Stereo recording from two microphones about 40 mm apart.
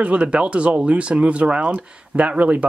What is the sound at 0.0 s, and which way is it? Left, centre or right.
Speech, right.